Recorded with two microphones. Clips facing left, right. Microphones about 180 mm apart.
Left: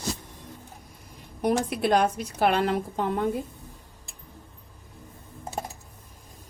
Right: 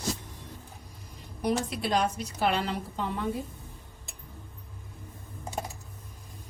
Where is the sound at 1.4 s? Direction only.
50° left (ahead or behind).